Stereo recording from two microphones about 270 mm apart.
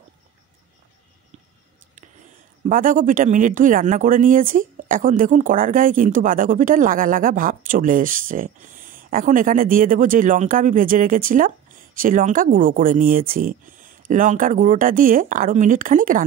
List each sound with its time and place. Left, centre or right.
2.6 s speech: right